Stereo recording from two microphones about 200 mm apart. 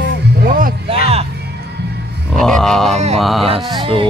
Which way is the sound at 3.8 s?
25° right (ahead or behind).